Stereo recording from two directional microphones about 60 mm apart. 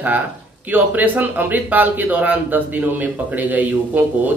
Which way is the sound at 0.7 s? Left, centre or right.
Right.